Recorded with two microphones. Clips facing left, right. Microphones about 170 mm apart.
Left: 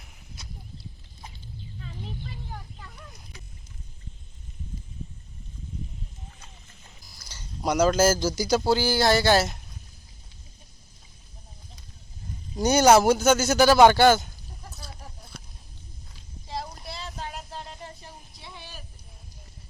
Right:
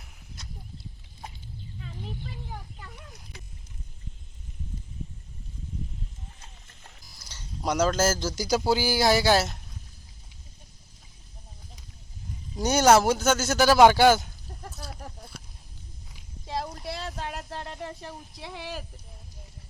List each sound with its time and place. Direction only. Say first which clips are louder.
7.3 s speech: left 2 dB; 5° left (ahead or behind)
12.5 s speech: left 2 dB; centre (ahead or behind)
16.5 s a sound: right 3 dB; 60° right (ahead or behind); by 18.9 s 90° right